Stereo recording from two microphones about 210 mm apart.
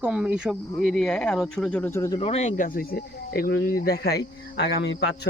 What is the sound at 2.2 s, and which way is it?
Speech, 30° left (ahead or behind).